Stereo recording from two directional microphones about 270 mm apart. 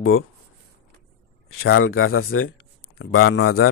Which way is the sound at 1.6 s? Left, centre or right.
Left.